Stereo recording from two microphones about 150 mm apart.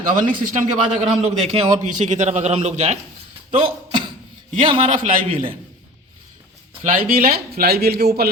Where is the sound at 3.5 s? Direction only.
35° right (ahead or behind).